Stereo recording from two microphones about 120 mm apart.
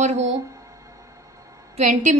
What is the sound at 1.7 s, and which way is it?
Speech, 85° right.